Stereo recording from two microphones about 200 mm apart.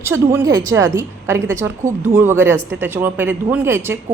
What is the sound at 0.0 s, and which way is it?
A woman's voice, 10° right (ahead or behind).